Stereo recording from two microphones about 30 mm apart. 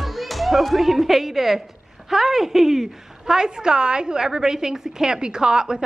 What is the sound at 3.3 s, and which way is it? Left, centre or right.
A woman's voice, right.